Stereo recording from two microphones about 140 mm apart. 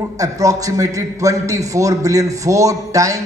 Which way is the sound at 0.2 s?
25° right (ahead or behind).